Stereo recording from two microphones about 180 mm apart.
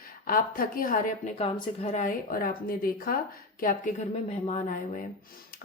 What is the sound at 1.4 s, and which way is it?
A woman's voice, 35° left (ahead or behind).